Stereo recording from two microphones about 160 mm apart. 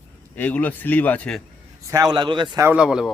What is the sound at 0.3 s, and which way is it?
Speech, 10° left (ahead or behind).